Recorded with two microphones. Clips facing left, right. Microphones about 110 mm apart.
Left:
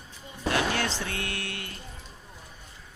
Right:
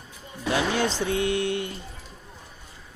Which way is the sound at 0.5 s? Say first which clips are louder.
Right 4 dB; 15° right (ahead or behind).